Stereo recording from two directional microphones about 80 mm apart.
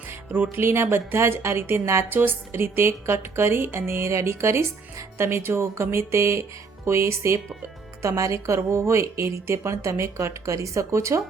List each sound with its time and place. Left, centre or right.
0.1 s speech: right